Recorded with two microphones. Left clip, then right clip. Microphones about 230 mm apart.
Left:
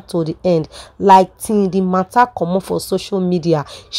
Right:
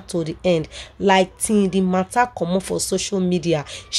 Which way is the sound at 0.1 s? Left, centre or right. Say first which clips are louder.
Left 4 dB; left.